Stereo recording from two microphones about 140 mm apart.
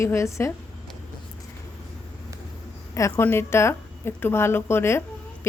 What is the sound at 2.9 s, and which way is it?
A woman's voice, 20° left (ahead or behind).